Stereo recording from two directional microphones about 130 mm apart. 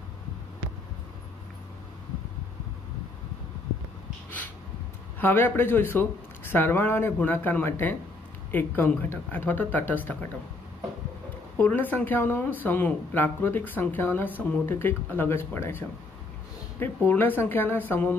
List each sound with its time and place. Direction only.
5.2 s speech: 15° left (ahead or behind)
11.5 s speech: 15° left (ahead or behind)
16.8 s speech: 15° left (ahead or behind)